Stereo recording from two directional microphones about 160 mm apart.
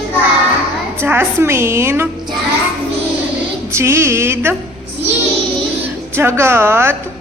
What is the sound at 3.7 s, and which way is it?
Speech, 15° right (ahead or behind).